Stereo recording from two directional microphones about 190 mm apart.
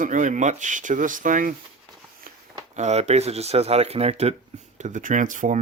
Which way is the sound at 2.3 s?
50° right (ahead or behind).